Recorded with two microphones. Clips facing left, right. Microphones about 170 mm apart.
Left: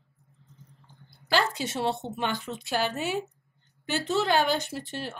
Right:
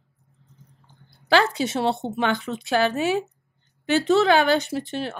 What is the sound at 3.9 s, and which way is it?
Speech, 75° right (ahead or behind).